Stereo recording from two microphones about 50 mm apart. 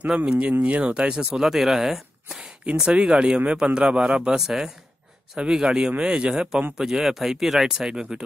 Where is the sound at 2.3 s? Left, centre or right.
Centre.